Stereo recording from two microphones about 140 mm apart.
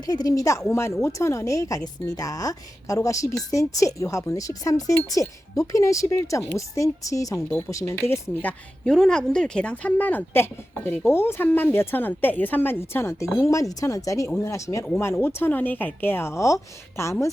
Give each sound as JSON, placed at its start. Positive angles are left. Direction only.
{"t": 0.0, "sound": "speech", "side_deg": 25}